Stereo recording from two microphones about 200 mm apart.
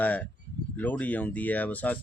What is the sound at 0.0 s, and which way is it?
Speech, 10° left (ahead or behind).